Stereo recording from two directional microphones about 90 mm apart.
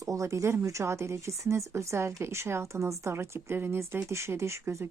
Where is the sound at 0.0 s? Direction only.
35° right (ahead or behind).